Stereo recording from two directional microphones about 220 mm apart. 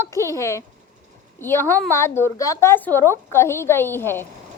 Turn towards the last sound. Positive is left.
turn(degrees=10)  # may be behind; listen again after turning